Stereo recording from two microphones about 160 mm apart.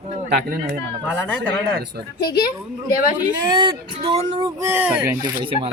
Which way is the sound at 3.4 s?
30° right (ahead or behind).